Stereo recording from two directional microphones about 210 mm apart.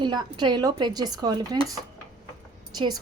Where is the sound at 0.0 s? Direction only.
20° right (ahead or behind).